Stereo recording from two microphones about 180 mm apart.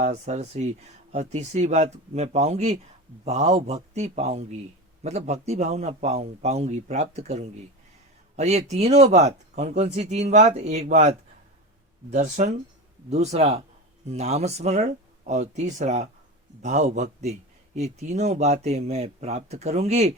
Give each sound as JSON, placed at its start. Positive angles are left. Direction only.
{"t": 0.0, "sound": "speech", "side_deg": -40}
{"t": 12.1, "sound": "speech", "side_deg": -40}